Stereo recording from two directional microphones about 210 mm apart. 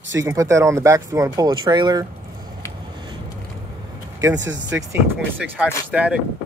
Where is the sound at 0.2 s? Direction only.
15° right (ahead or behind).